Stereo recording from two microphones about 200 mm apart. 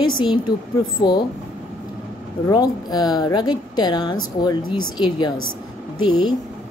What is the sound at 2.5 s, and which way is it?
A woman's voice, 20° left (ahead or behind).